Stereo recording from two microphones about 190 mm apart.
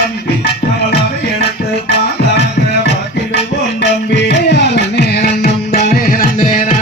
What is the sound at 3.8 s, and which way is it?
Music, 65° left (ahead or behind).